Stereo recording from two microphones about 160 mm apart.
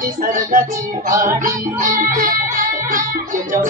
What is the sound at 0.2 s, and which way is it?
Music, 55° right (ahead or behind).